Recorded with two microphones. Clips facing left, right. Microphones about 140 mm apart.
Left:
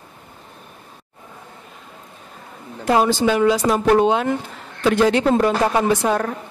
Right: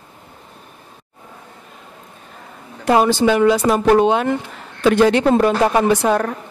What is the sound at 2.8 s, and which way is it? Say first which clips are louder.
A man's voice: right 3 dB; 70° right (ahead or behind).